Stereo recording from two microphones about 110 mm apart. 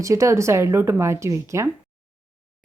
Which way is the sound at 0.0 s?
30° right (ahead or behind).